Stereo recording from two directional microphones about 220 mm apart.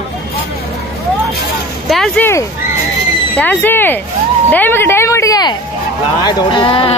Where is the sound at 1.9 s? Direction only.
5° left (ahead or behind).